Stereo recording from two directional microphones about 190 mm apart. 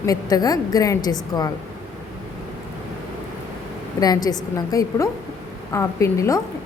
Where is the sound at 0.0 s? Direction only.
20° left (ahead or behind).